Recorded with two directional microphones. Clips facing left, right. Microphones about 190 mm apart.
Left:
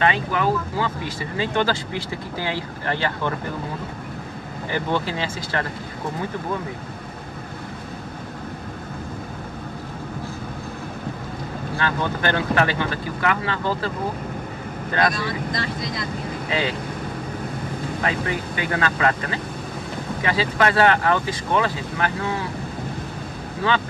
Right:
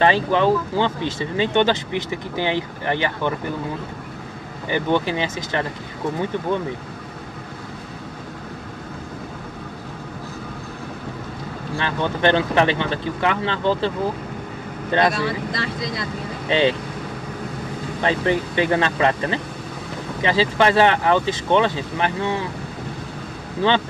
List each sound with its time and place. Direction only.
0.0 s speech: 30° right (ahead or behind)
4.6 s speech: 20° right (ahead or behind)
11.8 s speech: 25° right (ahead or behind)
16.4 s speech: 25° right (ahead or behind)
18.0 s speech: 30° right (ahead or behind)